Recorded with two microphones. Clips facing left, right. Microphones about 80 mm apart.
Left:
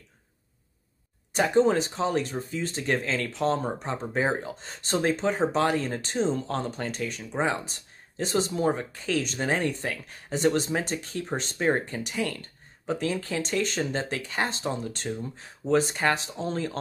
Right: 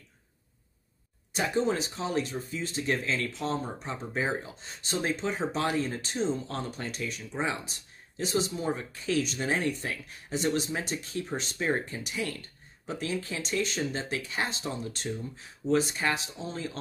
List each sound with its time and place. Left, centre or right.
1.3 s speech: left
15.7 s speech: left